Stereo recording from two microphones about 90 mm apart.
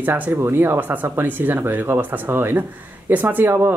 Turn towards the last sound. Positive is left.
turn(degrees=-25)  # may be behind; listen again after turning